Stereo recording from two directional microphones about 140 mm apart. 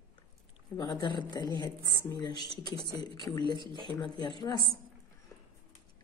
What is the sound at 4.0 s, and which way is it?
Speech, 30° left (ahead or behind).